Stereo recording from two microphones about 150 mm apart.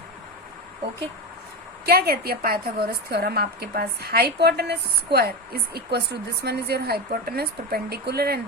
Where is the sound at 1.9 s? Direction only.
90° right.